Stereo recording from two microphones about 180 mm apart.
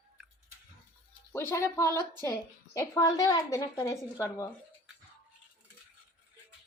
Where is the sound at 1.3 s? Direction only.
15° left (ahead or behind).